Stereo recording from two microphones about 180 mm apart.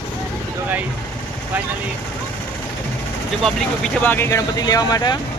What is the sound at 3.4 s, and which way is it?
Speech, 5° left (ahead or behind).